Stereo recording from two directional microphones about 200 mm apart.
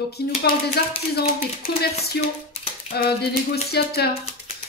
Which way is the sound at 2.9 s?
50° left (ahead or behind).